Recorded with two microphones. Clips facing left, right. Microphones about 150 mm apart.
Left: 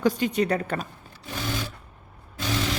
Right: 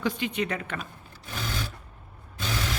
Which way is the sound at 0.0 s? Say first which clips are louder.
Left 6 dB; 40° left (ahead or behind).